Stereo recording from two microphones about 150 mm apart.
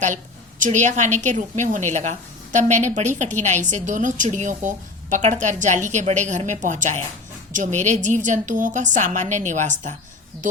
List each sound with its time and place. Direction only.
0.6 s a woman's voice: 55° right (ahead or behind)